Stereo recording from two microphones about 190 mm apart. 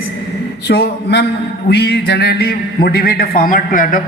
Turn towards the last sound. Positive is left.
turn(degrees=45)  # may be behind; listen again after turning